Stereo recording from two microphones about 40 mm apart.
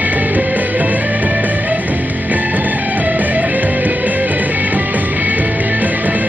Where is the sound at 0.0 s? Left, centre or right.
Right.